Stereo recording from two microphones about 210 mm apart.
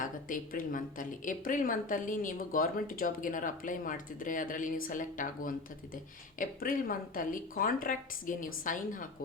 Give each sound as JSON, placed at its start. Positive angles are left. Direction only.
{"t": 0.0, "sound": "a woman's voice", "side_deg": 40}